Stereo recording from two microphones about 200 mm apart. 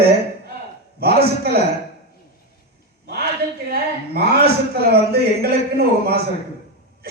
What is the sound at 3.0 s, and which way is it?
A man's voice, 50° right (ahead or behind).